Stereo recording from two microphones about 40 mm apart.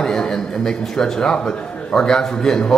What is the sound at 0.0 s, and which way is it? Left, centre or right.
A man's voice, centre.